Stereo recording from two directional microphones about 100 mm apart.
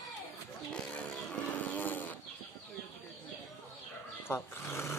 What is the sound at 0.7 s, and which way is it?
Roaring cats, 10° left (ahead or behind).